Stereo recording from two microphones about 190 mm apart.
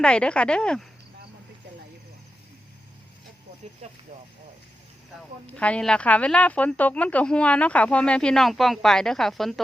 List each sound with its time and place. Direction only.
0.0 s speech: 5° left (ahead or behind)
5.5 s speech: 5° left (ahead or behind)